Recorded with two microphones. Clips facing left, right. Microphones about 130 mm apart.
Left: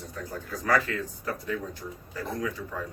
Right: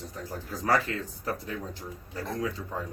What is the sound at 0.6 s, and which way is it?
Speech, 30° right (ahead or behind).